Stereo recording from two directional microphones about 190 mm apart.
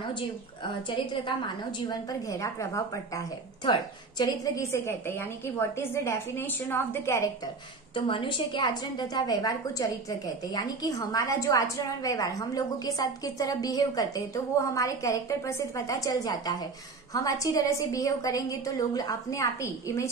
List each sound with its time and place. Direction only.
0.8 s a woman's voice: 25° left (ahead or behind)
7.9 s a woman's voice: 25° left (ahead or behind)